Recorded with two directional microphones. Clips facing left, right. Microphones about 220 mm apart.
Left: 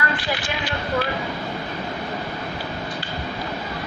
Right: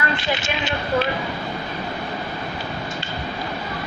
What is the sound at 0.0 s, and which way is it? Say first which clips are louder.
Speech: right 2 dB; 25° right (ahead or behind).